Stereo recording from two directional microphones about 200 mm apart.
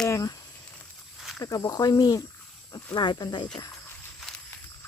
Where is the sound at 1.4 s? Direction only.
20° left (ahead or behind).